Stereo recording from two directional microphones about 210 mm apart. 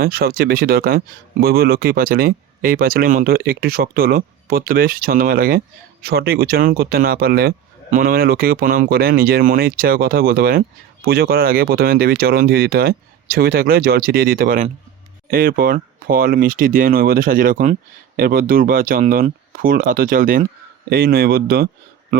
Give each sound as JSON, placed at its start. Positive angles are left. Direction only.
{"t": 0.0, "sound": "speech", "side_deg": -45}